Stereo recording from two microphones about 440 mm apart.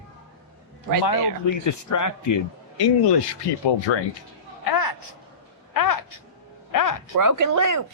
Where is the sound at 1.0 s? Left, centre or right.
Left.